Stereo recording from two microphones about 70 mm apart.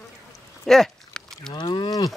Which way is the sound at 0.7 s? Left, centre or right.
Centre.